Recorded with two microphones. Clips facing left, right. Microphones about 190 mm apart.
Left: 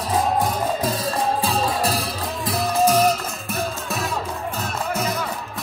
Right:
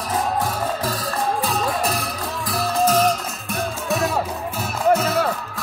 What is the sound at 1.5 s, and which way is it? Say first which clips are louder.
Music: left 1 dB; 35° left (ahead or behind).